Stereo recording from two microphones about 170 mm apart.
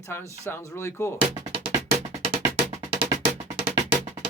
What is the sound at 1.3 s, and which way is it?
Music, 40° right (ahead or behind).